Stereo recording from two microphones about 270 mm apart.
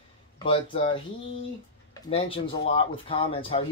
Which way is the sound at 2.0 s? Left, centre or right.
Left.